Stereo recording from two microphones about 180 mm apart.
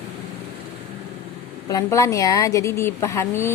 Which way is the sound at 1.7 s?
20° left (ahead or behind).